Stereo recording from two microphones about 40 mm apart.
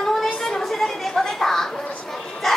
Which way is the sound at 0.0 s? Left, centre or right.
Centre.